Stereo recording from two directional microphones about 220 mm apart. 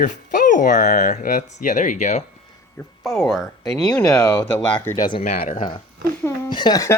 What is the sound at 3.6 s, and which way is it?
Speech, 15° left (ahead or behind).